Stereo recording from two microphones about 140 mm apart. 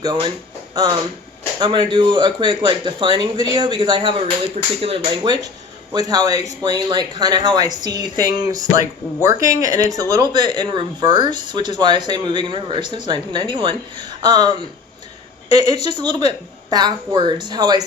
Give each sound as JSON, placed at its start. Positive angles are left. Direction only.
{"t": 0.0, "sound": "speech", "side_deg": -35}
{"t": 1.5, "sound": "speech", "side_deg": -35}
{"t": 15.5, "sound": "speech", "side_deg": -30}